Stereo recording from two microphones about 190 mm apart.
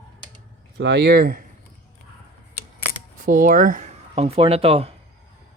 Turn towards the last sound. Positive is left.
turn(degrees=-30)  # may be behind; listen again after turning